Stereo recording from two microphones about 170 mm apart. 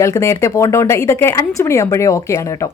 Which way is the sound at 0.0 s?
15° left (ahead or behind).